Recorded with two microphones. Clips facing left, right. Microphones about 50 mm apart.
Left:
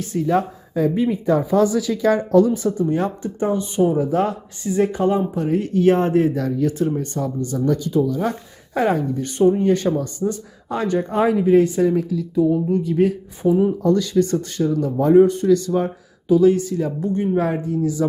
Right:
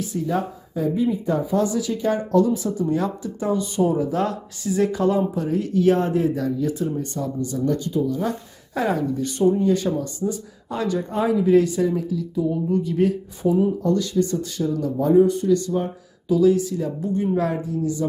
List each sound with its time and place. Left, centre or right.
0.0 s speech: left
2.9 s speech: left
5.4 s speech: left
11.4 s speech: left
13.8 s speech: left
14.6 s speech: left
15.4 s speech: left
16.3 s speech: left